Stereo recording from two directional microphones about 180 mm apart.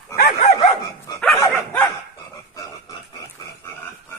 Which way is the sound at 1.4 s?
10° left (ahead or behind).